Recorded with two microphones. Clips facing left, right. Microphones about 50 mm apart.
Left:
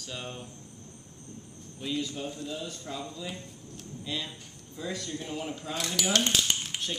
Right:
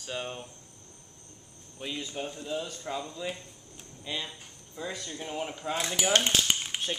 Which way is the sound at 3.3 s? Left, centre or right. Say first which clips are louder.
Right 2 dB; centre.